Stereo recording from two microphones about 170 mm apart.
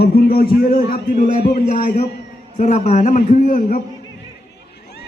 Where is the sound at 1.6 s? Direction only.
50° left (ahead or behind).